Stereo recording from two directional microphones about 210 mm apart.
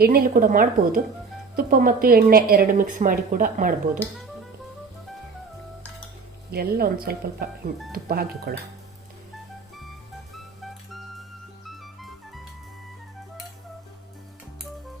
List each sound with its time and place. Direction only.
0.0 s a woman's voice: 45° right (ahead or behind)
6.5 s speech: 45° right (ahead or behind)
10.3 s music: centre (ahead or behind)